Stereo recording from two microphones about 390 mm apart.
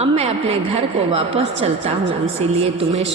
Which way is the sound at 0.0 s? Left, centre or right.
Centre.